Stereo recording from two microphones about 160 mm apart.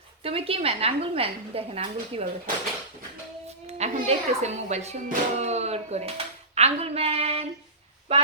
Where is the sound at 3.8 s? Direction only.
45° right (ahead or behind).